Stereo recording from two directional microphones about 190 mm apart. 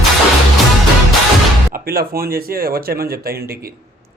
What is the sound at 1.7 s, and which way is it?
Speech, 50° right (ahead or behind).